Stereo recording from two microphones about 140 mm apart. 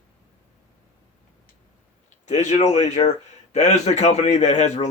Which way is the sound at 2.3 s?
55° left (ahead or behind).